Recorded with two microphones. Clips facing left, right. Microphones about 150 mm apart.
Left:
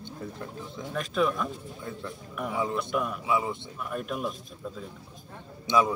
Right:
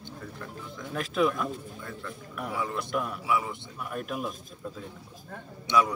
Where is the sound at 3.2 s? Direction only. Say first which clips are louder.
Left 1 dB; 20° left (ahead or behind).